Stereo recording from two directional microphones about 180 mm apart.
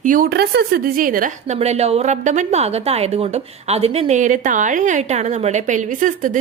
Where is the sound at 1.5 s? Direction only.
35° right (ahead or behind).